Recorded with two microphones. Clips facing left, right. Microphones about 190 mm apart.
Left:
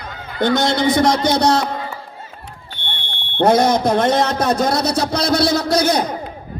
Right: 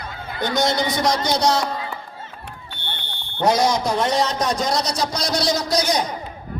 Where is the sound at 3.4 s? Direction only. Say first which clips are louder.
Left 4 dB; 55° left (ahead or behind).